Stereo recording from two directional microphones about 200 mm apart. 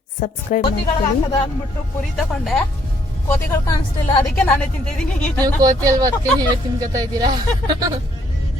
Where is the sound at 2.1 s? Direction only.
Centre (ahead or behind).